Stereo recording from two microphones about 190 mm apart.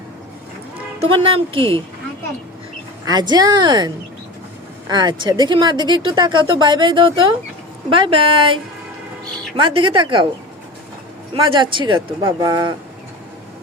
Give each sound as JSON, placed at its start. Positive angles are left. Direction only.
{"t": 0.9, "sound": "a woman's voice", "side_deg": -30}
{"t": 3.1, "sound": "a woman's voice", "side_deg": -20}
{"t": 11.3, "sound": "a woman's voice", "side_deg": -25}